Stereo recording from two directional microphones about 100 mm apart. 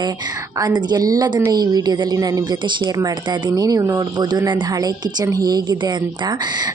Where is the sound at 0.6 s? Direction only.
40° right (ahead or behind).